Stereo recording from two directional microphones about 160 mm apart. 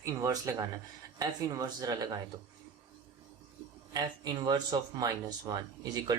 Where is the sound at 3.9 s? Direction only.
25° right (ahead or behind).